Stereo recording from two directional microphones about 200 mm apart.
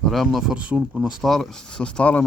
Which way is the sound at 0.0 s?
Centre (ahead or behind).